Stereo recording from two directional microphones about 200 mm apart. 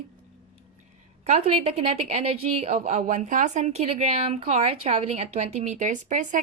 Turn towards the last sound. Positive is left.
turn(degrees=-40)  # may be behind; listen again after turning